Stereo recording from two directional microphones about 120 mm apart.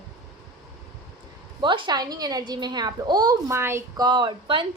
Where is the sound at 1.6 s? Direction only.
40° right (ahead or behind).